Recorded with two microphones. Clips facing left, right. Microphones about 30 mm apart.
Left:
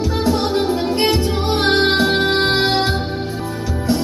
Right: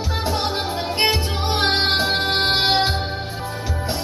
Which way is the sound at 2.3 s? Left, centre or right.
Centre.